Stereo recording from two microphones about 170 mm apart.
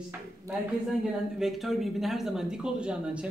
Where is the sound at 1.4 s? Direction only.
Centre (ahead or behind).